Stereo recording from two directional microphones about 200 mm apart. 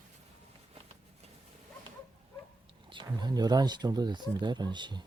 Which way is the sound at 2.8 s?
25° right (ahead or behind).